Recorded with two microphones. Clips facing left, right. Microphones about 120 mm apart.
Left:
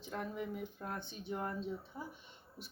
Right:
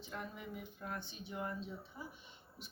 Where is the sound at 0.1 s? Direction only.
40° left (ahead or behind).